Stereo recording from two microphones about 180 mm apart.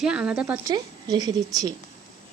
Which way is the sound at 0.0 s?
5° right (ahead or behind).